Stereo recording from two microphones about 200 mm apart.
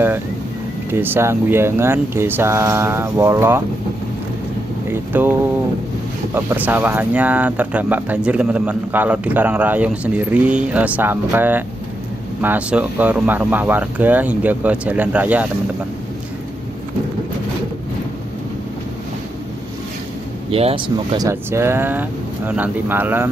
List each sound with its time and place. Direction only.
0.8 s speech: 10° right (ahead or behind)
4.8 s speech: 10° right (ahead or behind)
20.5 s speech: 25° right (ahead or behind)
21.3 s speech: 15° right (ahead or behind)